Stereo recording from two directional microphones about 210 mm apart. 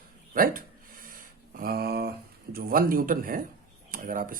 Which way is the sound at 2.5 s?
45° right (ahead or behind).